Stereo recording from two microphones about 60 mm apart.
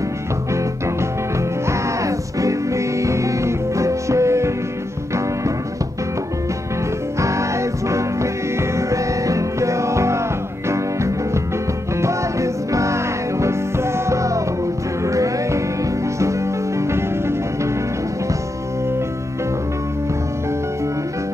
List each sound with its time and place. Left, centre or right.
1.7 s music: right
7.2 s music: right
16.8 s music: right